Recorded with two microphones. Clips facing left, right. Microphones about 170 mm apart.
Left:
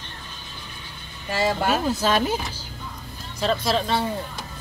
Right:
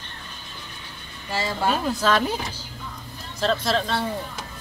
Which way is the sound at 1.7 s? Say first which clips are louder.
Even; 5° left (ahead or behind).